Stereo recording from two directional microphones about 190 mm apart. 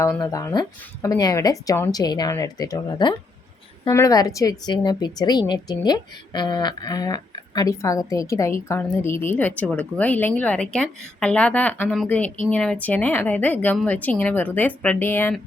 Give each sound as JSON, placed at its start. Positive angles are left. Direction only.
{"t": 0.0, "sound": "a woman's voice", "side_deg": 15}